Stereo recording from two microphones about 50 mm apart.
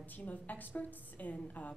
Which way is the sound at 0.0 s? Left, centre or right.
Left.